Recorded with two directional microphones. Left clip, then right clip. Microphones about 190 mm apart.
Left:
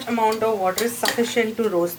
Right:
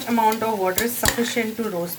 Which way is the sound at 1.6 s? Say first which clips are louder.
Left 5 dB; 5° right (ahead or behind).